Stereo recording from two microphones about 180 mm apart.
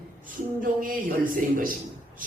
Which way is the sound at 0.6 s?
50° right (ahead or behind).